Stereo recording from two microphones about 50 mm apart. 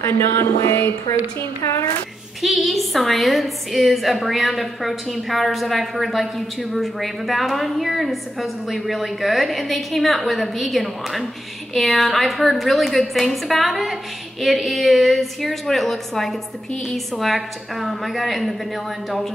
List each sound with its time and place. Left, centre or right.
0.0 s a sound: left
1.6 s a child's voice: left
2.4 s a woman's voice: centre